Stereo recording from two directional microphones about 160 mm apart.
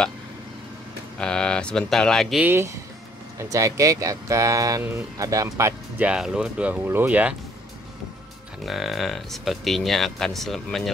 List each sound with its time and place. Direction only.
1.2 s speech: 5° left (ahead or behind)
2.4 s speech: 15° right (ahead or behind)
8.6 s speech: centre (ahead or behind)